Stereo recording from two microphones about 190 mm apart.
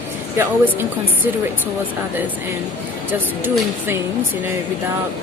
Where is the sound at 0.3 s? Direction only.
10° right (ahead or behind).